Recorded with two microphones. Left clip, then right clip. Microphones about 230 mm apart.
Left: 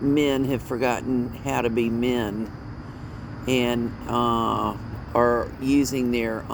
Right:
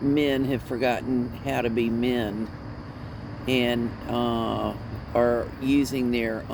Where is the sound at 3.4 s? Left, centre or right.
Left.